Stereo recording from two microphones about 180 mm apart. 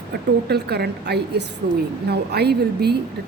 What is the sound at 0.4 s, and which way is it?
A woman's voice, 65° right (ahead or behind).